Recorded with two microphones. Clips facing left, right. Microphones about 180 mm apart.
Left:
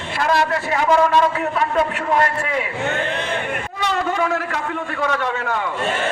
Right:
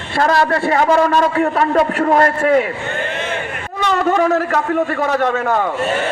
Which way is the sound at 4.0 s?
45° right (ahead or behind).